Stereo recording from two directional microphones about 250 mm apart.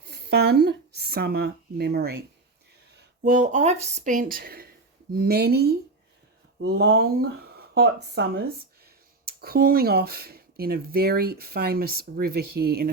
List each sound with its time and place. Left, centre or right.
0.3 s speech: right